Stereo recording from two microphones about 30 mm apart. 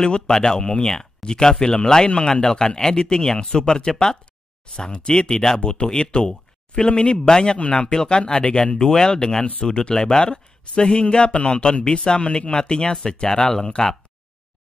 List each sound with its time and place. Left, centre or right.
0.0 s speech: left
2.0 s speech: left
4.7 s speech: left
5.1 s speech: left
8.7 s speech: left